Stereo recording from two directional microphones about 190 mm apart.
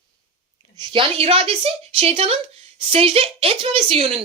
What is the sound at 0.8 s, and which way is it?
A woman's voice, 30° right (ahead or behind).